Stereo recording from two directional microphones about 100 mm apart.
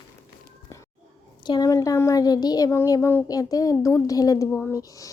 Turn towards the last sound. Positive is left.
turn(degrees=35)  # may be behind; listen again after turning